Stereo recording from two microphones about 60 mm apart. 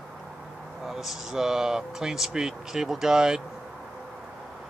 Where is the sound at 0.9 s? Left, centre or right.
Centre.